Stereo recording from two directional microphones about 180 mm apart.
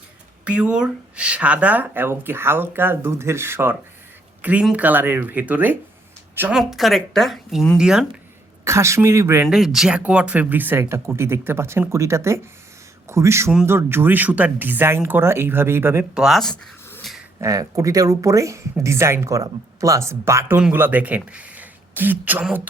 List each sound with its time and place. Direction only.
0.4 s speech: 5° right (ahead or behind)
8.6 s speech: 15° right (ahead or behind)
9.5 s speech: centre (ahead or behind)
16.2 s a sound: centre (ahead or behind)
17.4 s speech: 20° right (ahead or behind)